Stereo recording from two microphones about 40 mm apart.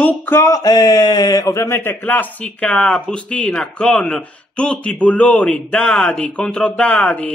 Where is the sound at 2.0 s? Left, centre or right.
Left.